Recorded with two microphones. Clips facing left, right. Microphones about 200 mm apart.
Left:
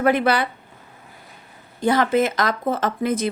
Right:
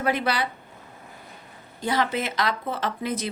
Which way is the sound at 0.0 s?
55° left (ahead or behind).